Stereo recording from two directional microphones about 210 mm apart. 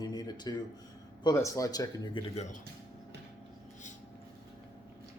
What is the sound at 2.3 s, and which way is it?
Speech, 30° left (ahead or behind).